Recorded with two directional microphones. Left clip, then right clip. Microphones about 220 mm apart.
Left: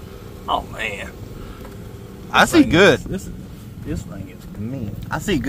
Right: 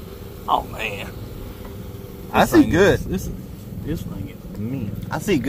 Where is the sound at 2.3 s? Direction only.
30° left (ahead or behind).